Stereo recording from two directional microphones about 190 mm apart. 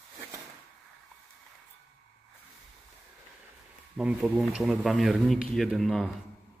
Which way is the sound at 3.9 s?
5° right (ahead or behind).